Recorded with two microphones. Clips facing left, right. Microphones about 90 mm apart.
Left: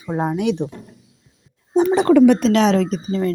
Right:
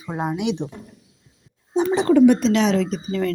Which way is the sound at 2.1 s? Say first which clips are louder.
Left 1 dB; 90° left.